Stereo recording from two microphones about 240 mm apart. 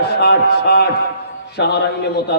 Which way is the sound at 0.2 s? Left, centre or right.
Left.